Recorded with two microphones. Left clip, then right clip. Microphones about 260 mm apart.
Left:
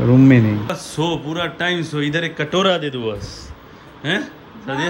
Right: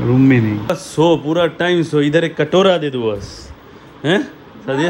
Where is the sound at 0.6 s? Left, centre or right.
Centre.